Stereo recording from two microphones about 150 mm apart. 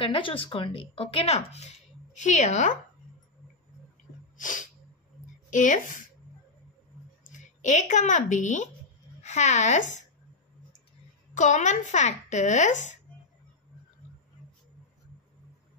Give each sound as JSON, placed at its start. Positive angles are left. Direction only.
{"t": 0.0, "sound": "speech", "side_deg": 35}
{"t": 4.4, "sound": "sneeze", "side_deg": 60}
{"t": 5.5, "sound": "speech", "side_deg": 55}
{"t": 7.3, "sound": "a woman's voice", "side_deg": 55}
{"t": 11.3, "sound": "speech", "side_deg": 55}